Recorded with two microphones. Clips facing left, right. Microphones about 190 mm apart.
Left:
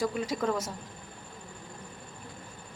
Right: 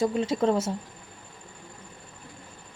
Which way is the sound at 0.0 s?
25° right (ahead or behind).